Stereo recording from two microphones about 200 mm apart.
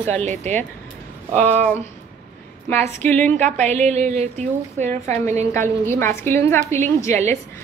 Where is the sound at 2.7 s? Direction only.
10° left (ahead or behind).